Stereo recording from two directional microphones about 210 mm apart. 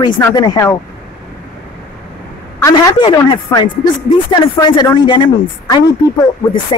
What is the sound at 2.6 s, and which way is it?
A woman's voice, 20° left (ahead or behind).